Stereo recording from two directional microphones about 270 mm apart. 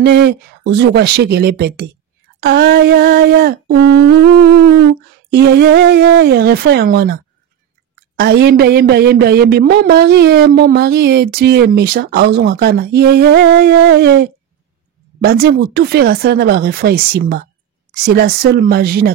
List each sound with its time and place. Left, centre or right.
0.0 s speech: right
8.2 s speech: right